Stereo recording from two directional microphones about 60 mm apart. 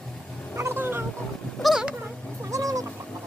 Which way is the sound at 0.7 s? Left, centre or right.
Right.